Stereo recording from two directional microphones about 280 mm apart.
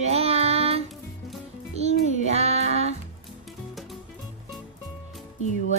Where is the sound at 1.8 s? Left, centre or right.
Right.